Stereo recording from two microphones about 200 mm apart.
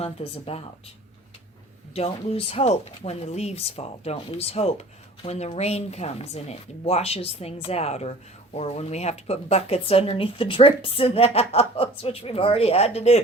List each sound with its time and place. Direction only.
0.0 s speech: 30° left (ahead or behind)
2.0 s speech: 30° left (ahead or behind)